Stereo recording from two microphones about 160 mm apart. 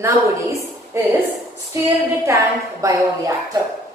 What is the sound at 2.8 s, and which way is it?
Speech, 20° right (ahead or behind).